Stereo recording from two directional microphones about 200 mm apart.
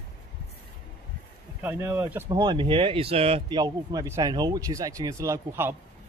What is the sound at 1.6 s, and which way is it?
Speech, 10° right (ahead or behind).